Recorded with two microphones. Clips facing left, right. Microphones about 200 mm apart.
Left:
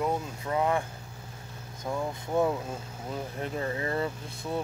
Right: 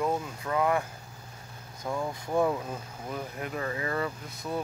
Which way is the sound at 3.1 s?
30° left (ahead or behind).